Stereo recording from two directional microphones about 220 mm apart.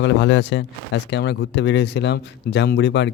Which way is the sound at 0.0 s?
55° left (ahead or behind).